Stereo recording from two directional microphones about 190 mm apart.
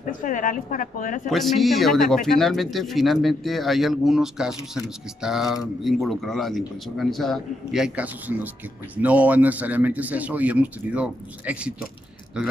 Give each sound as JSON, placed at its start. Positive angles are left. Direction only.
{"t": 0.2, "sound": "a woman's voice", "side_deg": 45}
{"t": 1.3, "sound": "a man's voice", "side_deg": 0}